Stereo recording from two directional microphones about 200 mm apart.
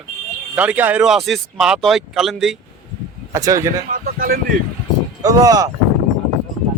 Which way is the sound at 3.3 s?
15° right (ahead or behind).